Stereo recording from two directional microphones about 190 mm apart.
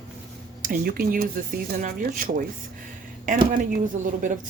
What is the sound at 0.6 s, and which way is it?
Speech, 50° right (ahead or behind).